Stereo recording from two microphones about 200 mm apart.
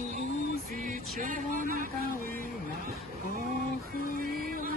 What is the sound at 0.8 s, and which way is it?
Music, 40° right (ahead or behind).